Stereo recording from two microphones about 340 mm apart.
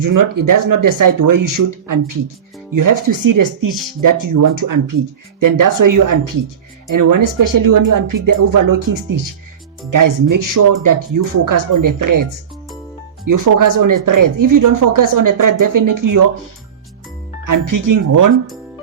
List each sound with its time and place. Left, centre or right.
0.0 s speech: right
17.4 s speech: right